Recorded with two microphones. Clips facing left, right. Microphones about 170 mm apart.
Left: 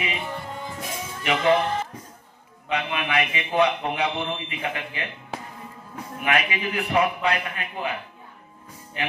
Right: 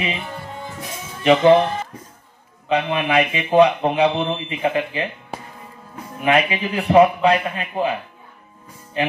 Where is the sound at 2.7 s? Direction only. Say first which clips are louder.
Right 7 dB; 30° right (ahead or behind).